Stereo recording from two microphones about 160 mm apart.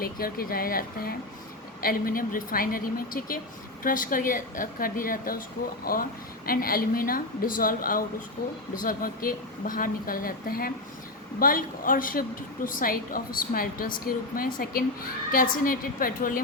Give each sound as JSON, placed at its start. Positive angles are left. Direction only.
{"t": 0.0, "sound": "a woman's voice", "side_deg": 65}